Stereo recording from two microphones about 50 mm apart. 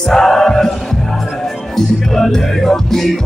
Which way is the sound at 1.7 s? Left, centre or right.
Centre.